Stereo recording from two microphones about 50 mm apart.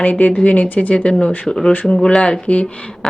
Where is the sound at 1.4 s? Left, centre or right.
Centre.